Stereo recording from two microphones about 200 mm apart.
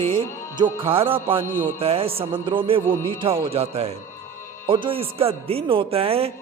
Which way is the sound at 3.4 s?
30° right (ahead or behind).